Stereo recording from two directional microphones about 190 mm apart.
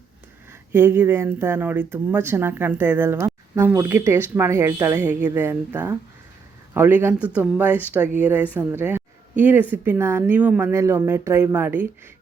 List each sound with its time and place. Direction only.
0.7 s speech: 10° right (ahead or behind)